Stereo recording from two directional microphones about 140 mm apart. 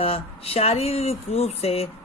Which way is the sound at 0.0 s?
45° left (ahead or behind).